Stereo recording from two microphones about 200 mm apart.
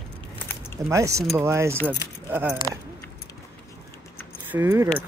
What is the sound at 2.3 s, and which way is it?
Speech, 10° right (ahead or behind).